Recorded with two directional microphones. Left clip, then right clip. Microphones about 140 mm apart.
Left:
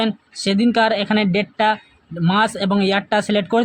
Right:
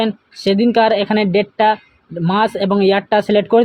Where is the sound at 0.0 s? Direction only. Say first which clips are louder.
Right 3 dB; 20° right (ahead or behind).